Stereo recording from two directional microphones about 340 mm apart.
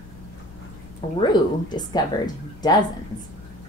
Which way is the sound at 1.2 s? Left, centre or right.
Centre.